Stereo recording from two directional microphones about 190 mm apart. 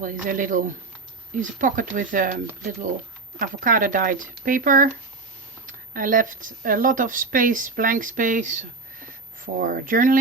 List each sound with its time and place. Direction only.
0.0 s speech: 45° right (ahead or behind)